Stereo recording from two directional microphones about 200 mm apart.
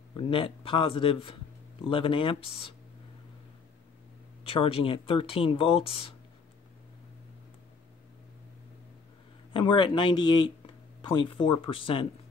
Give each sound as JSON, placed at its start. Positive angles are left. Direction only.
{"t": 0.1, "sound": "a man's voice", "side_deg": 25}
{"t": 4.5, "sound": "speech", "side_deg": 30}
{"t": 9.5, "sound": "speech", "side_deg": 25}